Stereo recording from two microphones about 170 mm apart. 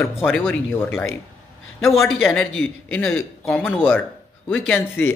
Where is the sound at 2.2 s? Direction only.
5° left (ahead or behind).